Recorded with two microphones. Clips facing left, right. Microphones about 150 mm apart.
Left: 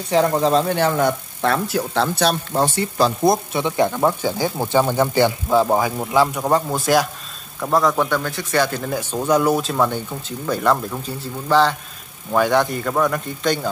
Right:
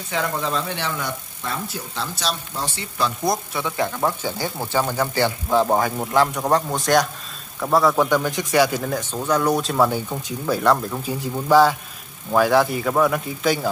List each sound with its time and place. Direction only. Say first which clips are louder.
0.1 s speech: left 8 dB; 35° left (ahead or behind)
1.4 s speech: left 11 dB; 70° left (ahead or behind); by 3.1 s 50° left (ahead or behind)
3.3 s speech: left 5 dB; 25° left (ahead or behind)
4.0 s speech: left 5 dB; 15° left (ahead or behind); by 8.8 s 10° right (ahead or behind)
9.1 s speech: left 3 dB; 15° left (ahead or behind); by 10.5 s 10° right (ahead or behind)
10.5 s speech: even; centre (ahead or behind)
11.1 s speech: right 3 dB; 10° right (ahead or behind)